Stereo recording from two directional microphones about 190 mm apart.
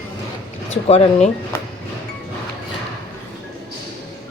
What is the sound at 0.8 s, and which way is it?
Speech, 35° left (ahead or behind).